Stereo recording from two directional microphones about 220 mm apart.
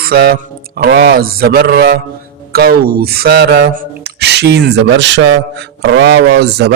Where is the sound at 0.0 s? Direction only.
45° right (ahead or behind).